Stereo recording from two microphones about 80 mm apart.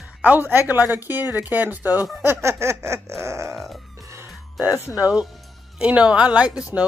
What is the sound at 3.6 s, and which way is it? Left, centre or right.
Music, centre.